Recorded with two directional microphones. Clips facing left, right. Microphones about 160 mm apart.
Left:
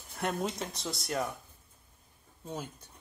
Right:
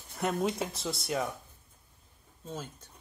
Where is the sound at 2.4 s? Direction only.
15° left (ahead or behind).